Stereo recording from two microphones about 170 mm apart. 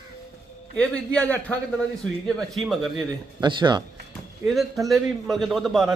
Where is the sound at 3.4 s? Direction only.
25° right (ahead or behind).